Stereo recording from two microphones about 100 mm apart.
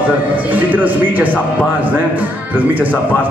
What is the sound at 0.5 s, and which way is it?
A man's voice, 15° right (ahead or behind).